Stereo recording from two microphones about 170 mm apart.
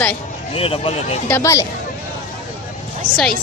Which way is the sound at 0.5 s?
35° left (ahead or behind).